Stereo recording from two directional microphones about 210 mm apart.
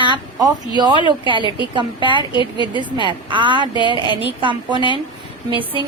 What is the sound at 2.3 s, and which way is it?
Speech, 20° left (ahead or behind).